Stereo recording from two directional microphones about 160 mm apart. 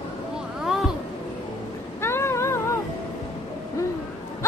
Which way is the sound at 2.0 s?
15° left (ahead or behind).